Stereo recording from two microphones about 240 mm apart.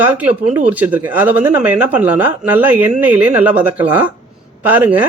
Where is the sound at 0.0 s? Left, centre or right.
Centre.